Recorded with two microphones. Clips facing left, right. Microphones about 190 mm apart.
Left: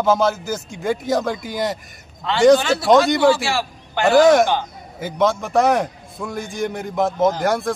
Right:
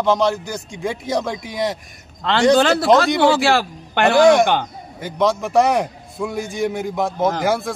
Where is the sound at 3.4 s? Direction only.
60° right (ahead or behind).